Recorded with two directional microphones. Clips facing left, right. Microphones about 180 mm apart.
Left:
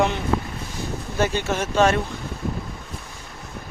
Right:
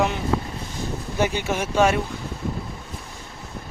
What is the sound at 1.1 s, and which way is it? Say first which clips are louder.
Speech: left 1 dB; 15° right (ahead or behind).